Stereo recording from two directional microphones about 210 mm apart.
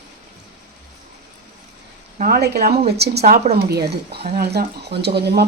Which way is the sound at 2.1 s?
45° right (ahead or behind).